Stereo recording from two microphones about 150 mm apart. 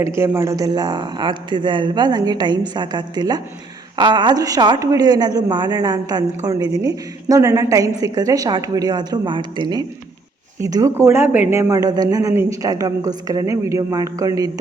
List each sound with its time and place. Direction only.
0.2 s speech: 20° right (ahead or behind)
11.7 s speech: 25° right (ahead or behind)